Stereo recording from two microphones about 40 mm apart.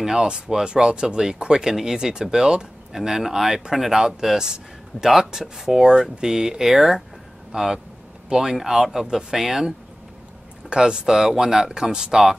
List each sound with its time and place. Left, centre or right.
0.0 s speech: centre